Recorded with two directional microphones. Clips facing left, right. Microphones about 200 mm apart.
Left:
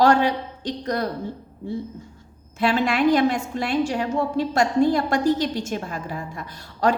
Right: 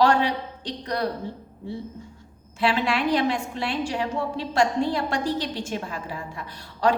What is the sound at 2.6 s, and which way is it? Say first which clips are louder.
A woman's voice: left 3 dB; 45° left (ahead or behind).